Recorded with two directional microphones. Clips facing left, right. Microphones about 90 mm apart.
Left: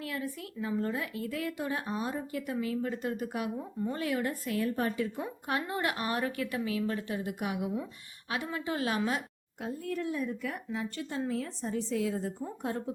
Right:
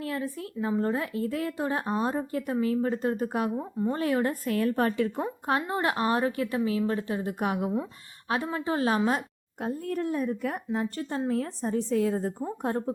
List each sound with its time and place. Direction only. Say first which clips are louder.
0.0 s speech: right 5 dB; 35° right (ahead or behind); by 5.1 s 65° right (ahead or behind)
5.1 s speech: right 6 dB; 40° right (ahead or behind)